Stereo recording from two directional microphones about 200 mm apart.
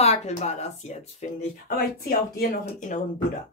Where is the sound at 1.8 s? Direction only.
50° left (ahead or behind).